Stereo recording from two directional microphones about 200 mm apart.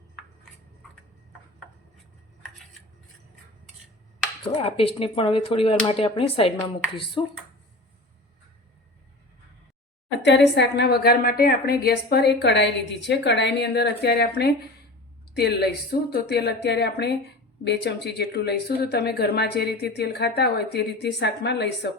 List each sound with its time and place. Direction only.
4.5 s speech: 30° left (ahead or behind)
10.2 s speech: 60° left (ahead or behind)